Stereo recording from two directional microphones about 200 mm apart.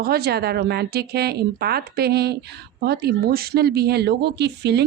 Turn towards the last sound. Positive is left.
turn(degrees=-55)  # may be behind; listen again after turning